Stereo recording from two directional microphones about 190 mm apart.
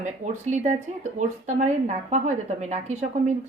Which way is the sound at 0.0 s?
40° right (ahead or behind).